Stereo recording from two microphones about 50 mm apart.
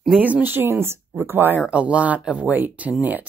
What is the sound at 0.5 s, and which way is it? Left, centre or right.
Speech, right.